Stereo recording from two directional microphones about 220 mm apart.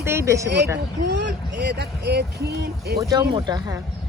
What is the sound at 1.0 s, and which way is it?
Speech, 50° right (ahead or behind).